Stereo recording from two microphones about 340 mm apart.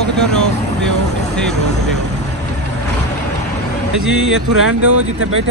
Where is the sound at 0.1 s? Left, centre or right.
Centre.